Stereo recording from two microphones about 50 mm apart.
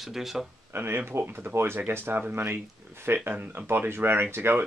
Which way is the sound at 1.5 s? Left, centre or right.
Right.